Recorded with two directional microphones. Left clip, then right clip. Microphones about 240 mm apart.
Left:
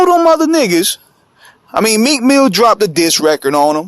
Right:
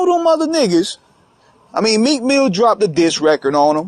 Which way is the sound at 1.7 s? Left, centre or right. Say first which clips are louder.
Left 3 dB; left.